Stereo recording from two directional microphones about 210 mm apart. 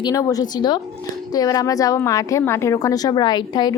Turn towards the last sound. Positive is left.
turn(degrees=20)  # may be behind; listen again after turning